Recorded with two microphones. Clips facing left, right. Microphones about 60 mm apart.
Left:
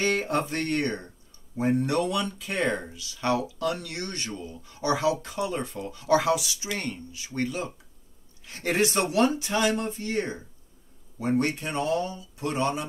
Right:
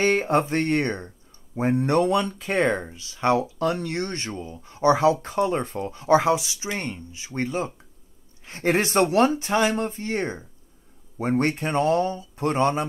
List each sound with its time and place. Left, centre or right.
0.0 s speech: right